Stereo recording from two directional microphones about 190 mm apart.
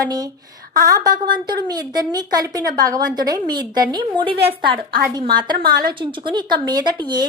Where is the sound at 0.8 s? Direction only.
20° right (ahead or behind).